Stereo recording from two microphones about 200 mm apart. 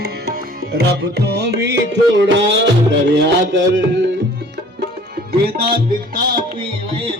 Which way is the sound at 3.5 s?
65° right (ahead or behind).